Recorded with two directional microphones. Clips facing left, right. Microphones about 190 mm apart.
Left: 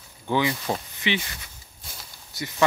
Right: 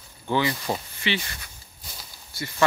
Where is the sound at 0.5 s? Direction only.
Centre (ahead or behind).